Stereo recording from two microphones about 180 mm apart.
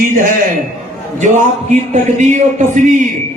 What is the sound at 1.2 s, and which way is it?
A man's voice, 45° right (ahead or behind).